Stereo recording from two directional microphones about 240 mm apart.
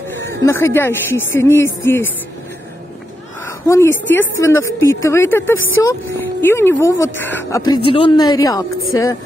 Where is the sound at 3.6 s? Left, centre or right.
Centre.